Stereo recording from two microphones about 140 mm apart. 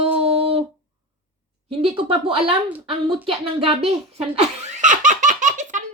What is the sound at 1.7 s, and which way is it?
Speech, 40° right (ahead or behind).